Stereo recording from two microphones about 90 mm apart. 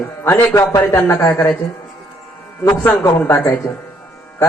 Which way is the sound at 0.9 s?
25° left (ahead or behind).